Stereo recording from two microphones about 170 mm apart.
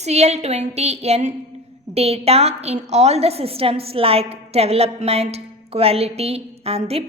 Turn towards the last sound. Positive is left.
turn(degrees=-35)  # may be behind; listen again after turning